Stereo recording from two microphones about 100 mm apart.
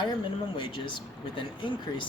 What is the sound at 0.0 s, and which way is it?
Speech, 50° left (ahead or behind).